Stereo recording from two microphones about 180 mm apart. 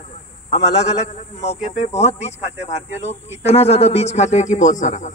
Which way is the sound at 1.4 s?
35° left (ahead or behind).